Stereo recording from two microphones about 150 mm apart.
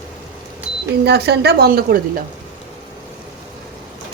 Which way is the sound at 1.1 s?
90° right.